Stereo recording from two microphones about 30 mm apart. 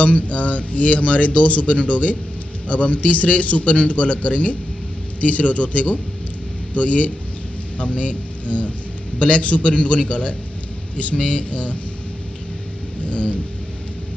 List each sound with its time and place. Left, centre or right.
0.0 s speech: left